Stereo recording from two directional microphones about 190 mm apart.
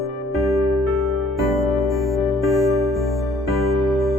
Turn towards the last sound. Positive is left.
turn(degrees=0)  # may be behind; listen again after turning